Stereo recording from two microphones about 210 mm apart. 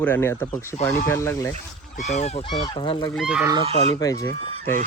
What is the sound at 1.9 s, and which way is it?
Speech, 35° left (ahead or behind).